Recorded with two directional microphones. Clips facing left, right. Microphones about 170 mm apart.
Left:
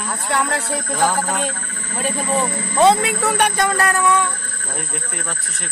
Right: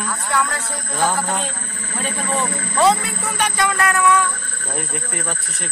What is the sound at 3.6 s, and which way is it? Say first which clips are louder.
Music: left 1 dB; 35° left (ahead or behind).